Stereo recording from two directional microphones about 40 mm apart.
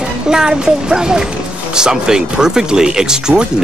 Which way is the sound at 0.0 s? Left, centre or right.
Centre.